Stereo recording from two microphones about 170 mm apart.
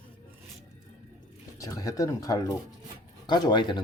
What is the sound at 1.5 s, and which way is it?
Speech, 20° left (ahead or behind).